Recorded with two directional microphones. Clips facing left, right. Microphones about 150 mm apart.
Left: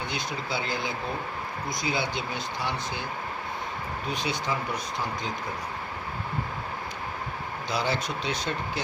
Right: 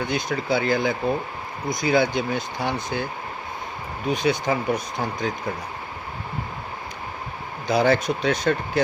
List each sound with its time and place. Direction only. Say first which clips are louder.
0.1 s speech: right 8 dB; 50° right (ahead or behind)
4.1 s speech: right 9 dB; 50° right (ahead or behind)
7.7 s speech: right 10 dB; 50° right (ahead or behind)